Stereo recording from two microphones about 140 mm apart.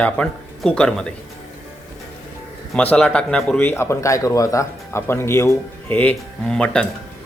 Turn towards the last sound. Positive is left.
turn(degrees=10)  # may be behind; listen again after turning